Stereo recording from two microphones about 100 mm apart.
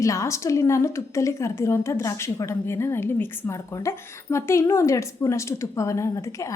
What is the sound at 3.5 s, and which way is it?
A woman's voice, 35° left (ahead or behind).